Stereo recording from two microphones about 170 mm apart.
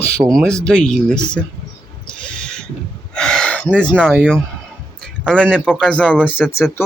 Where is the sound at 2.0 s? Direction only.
5° left (ahead or behind).